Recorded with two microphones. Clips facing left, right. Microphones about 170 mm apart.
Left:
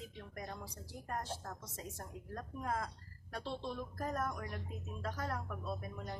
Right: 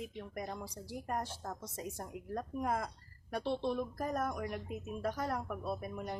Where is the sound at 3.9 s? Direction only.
15° right (ahead or behind).